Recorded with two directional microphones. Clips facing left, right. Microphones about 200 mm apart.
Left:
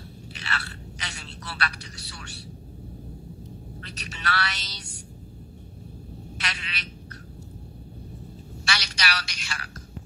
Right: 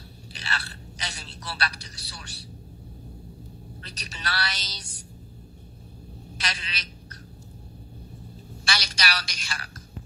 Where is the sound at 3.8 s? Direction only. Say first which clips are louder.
Left 3 dB; 35° right (ahead or behind).